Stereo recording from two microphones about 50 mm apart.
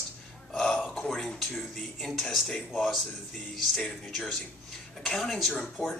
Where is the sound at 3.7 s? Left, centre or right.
Centre.